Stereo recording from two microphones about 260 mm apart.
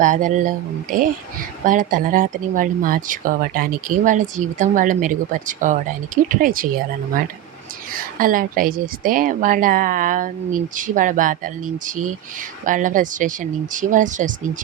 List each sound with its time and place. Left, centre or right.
0.0 s speech: right
7.9 s speech: right